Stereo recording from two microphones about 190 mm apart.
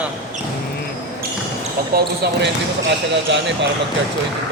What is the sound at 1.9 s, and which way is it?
Speech, 55° right (ahead or behind).